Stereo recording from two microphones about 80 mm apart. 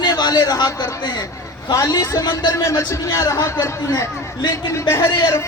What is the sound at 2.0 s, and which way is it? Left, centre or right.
A man's voice, left.